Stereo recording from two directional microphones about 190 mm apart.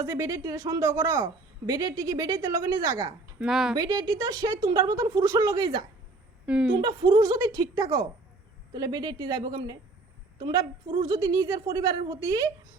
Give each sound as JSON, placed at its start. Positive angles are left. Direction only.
{"t": 0.0, "sound": "speech", "side_deg": -15}
{"t": 3.4, "sound": "speech", "side_deg": -5}
{"t": 3.8, "sound": "a woman's voice", "side_deg": -20}
{"t": 6.4, "sound": "a woman's voice", "side_deg": -5}
{"t": 6.7, "sound": "a woman's voice", "side_deg": -25}